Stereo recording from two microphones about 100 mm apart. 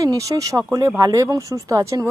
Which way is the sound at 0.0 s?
35° right (ahead or behind).